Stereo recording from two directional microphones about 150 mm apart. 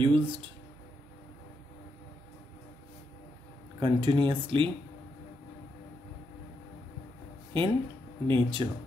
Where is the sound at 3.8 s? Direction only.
30° right (ahead or behind).